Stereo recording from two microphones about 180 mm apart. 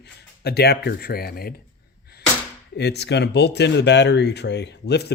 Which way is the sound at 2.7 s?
70° left (ahead or behind).